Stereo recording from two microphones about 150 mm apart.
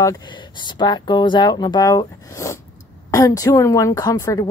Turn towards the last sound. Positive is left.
turn(degrees=25)  # may be behind; listen again after turning